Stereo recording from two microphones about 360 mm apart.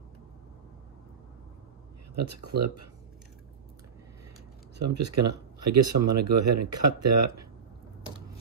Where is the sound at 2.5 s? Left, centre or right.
Right.